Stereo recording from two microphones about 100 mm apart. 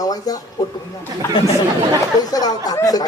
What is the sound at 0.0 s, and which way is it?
Speech, 40° left (ahead or behind).